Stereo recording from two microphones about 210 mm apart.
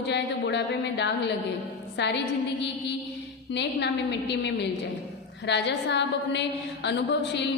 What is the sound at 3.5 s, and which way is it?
A woman's voice, 55° left (ahead or behind).